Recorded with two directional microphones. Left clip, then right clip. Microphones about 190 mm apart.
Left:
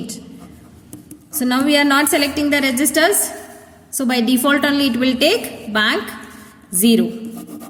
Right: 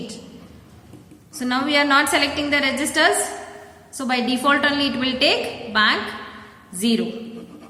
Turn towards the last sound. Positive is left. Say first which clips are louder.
# left 6 dB
turn(degrees=50)  # may be behind; listen again after turning